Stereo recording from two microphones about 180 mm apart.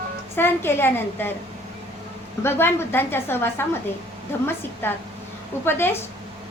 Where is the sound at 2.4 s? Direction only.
10° left (ahead or behind).